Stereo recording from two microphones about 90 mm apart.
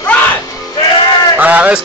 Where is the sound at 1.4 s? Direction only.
15° right (ahead or behind).